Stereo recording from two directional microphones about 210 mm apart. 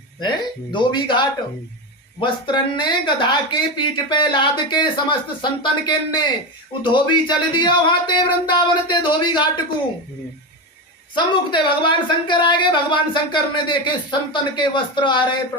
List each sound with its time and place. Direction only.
0.2 s speech: 20° left (ahead or behind)
11.1 s speech: 20° left (ahead or behind)